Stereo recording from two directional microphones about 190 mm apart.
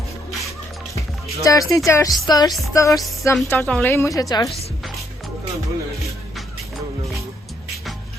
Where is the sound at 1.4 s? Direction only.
15° left (ahead or behind).